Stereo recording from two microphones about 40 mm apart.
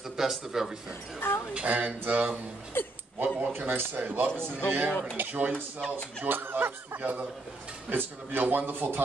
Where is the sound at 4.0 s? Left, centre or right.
Right.